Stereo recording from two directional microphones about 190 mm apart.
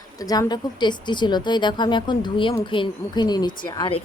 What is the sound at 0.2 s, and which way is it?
Speech, 20° left (ahead or behind).